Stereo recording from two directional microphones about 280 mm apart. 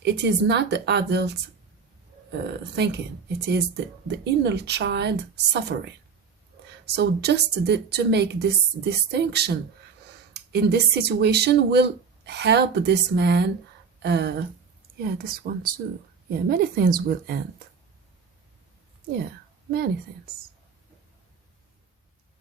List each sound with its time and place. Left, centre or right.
0.0 s speech: right
2.4 s speech: right
19.7 s speech: right